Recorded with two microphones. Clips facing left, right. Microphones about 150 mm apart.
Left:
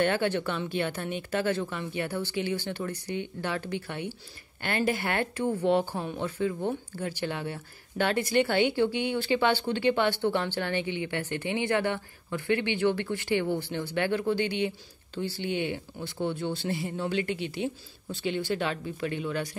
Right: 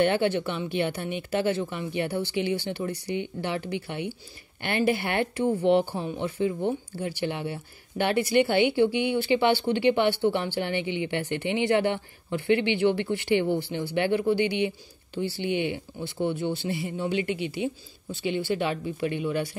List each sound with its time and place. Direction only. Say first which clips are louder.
0.0 s speech: right 3 dB; 15° right (ahead or behind)